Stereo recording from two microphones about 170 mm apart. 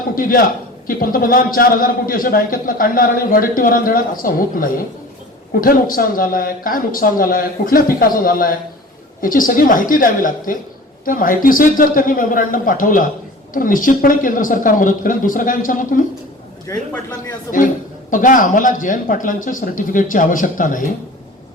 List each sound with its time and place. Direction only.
0.2 s a man's voice: 55° left (ahead or behind)
16.6 s a man's voice: 20° left (ahead or behind)
18.1 s speech: 50° left (ahead or behind)